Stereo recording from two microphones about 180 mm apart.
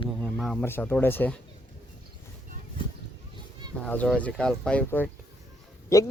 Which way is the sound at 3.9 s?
5° left (ahead or behind).